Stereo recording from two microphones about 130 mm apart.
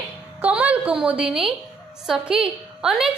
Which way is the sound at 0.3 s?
10° right (ahead or behind).